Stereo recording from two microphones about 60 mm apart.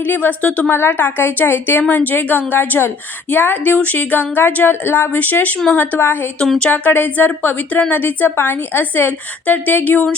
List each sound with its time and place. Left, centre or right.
0.0 s a woman's voice: left
0.7 s a woman's voice: left